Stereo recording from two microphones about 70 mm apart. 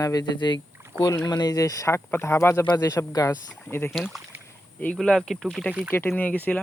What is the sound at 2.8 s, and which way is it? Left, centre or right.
Speech, left.